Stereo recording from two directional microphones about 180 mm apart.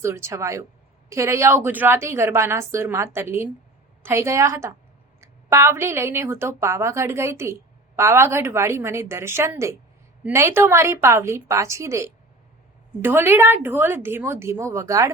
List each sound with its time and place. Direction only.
0.0 s a woman's voice: 15° right (ahead or behind)